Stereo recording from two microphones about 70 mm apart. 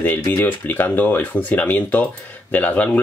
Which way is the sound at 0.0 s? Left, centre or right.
Left.